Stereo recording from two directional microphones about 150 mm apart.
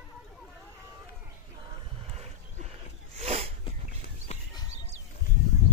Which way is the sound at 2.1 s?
45° right (ahead or behind).